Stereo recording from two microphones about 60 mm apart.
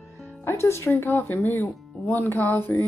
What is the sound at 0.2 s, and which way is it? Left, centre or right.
Speech, left.